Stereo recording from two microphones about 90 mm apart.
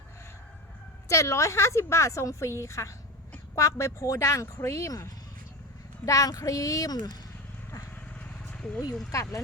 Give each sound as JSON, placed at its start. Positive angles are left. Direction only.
{"t": 1.0, "sound": "speech", "side_deg": 35}
{"t": 6.1, "sound": "speech", "side_deg": 40}
{"t": 8.2, "sound": "vehicle", "side_deg": 10}
{"t": 9.1, "sound": "speech", "side_deg": 40}